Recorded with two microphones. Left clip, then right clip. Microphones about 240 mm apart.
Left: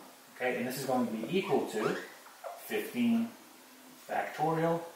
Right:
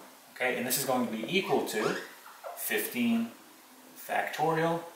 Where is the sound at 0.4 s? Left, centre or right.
Centre.